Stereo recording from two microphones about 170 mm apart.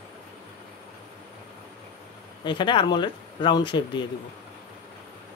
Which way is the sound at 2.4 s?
30° left (ahead or behind).